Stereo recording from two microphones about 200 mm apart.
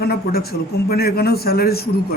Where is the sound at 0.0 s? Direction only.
50° left (ahead or behind).